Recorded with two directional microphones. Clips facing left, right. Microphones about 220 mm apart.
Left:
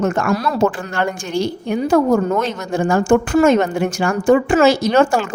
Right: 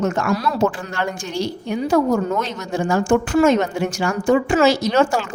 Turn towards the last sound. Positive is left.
turn(degrees=50)  # may be behind; listen again after turning